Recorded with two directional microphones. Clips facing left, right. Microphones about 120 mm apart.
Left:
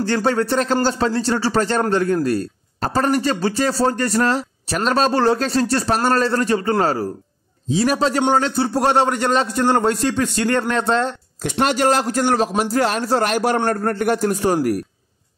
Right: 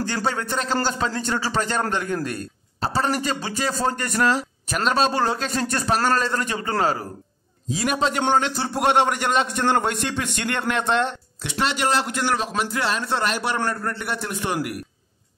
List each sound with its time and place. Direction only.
0.0 s a man's voice: 40° left (ahead or behind)